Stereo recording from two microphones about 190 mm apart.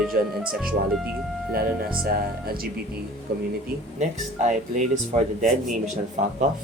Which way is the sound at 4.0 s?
40° right (ahead or behind).